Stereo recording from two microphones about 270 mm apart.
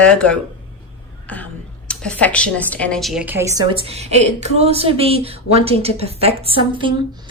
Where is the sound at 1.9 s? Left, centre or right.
Centre.